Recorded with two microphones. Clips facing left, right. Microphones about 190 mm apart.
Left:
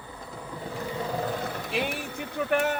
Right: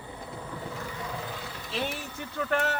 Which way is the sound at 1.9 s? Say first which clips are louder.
Left 3 dB; 60° left (ahead or behind).